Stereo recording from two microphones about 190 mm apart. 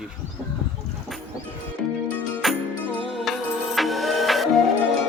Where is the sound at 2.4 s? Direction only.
Centre (ahead or behind).